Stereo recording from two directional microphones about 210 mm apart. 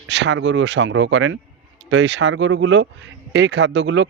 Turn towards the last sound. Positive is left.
turn(degrees=-55)  # may be behind; listen again after turning